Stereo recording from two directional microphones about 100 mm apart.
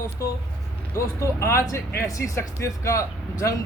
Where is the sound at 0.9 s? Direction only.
30° left (ahead or behind).